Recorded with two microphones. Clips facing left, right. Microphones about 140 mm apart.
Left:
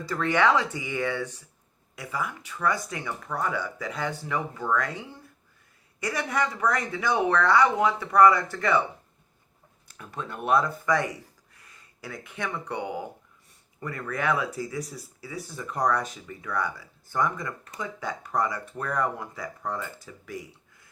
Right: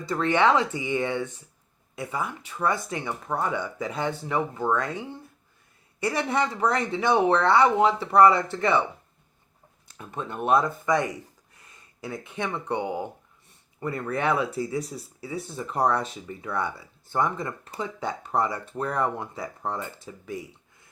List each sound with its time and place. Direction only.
0.0 s speech: 20° right (ahead or behind)
10.0 s speech: 20° right (ahead or behind)